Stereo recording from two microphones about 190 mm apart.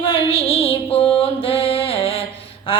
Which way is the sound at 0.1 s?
30° left (ahead or behind).